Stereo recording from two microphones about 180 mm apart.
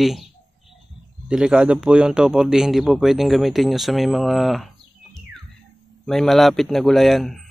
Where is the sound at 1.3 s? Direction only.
5° right (ahead or behind).